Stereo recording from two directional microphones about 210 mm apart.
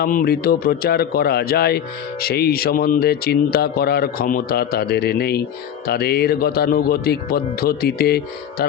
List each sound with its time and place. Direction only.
0.0 s a man's voice: 45° left (ahead or behind)